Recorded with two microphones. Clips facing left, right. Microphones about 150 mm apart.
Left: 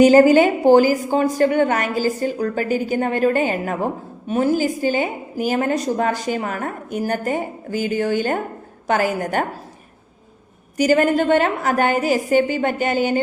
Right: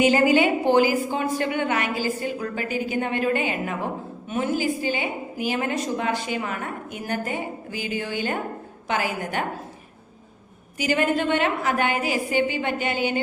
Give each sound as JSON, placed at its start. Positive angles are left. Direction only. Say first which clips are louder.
{"t": 0.0, "sound": "a woman's voice", "louder": "left 7 dB", "side_deg": 40}
{"t": 10.8, "sound": "a woman's voice", "louder": "left 7 dB", "side_deg": 40}